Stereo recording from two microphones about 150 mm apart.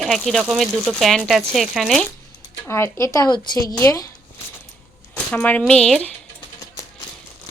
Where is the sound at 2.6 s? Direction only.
15° left (ahead or behind).